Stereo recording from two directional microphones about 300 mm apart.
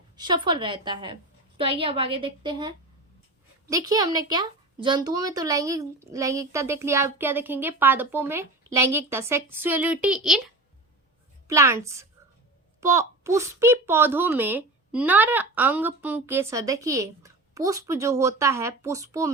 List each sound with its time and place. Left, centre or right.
0.2 s a woman's voice: centre